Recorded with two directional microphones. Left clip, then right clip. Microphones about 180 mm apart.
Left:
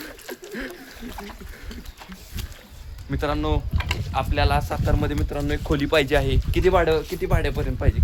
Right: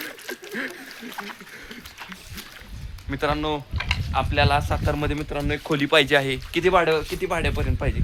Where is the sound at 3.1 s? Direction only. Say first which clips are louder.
Right 1 dB; 40° right (ahead or behind).